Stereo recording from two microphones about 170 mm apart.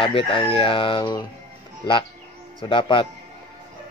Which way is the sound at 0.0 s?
30° left (ahead or behind).